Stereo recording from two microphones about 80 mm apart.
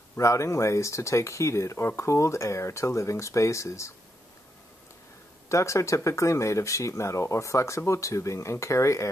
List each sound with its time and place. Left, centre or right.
0.1 s speech: left
5.5 s speech: left